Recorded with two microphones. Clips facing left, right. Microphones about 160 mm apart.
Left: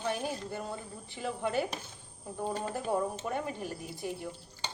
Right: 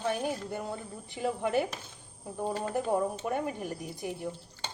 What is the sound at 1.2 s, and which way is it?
Speech, 15° right (ahead or behind).